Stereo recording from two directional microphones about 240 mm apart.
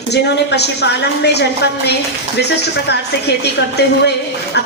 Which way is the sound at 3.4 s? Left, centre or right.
Left.